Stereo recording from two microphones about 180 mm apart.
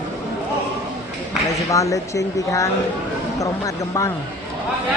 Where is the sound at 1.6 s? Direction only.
15° left (ahead or behind).